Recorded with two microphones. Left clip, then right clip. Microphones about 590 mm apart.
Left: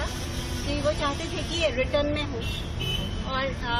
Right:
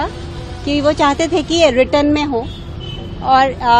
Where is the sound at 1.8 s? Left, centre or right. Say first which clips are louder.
Right 13 dB; right.